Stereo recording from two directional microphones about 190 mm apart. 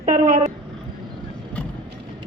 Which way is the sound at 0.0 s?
40° right (ahead or behind).